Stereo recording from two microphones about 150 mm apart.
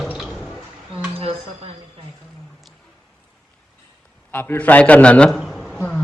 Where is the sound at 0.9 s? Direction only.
40° right (ahead or behind).